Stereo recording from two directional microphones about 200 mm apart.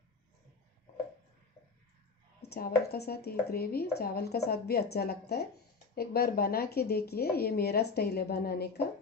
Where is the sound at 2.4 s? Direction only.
50° left (ahead or behind).